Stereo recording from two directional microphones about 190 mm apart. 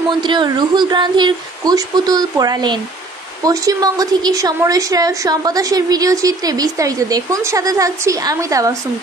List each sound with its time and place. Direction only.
0.2 s a woman's voice: 25° right (ahead or behind)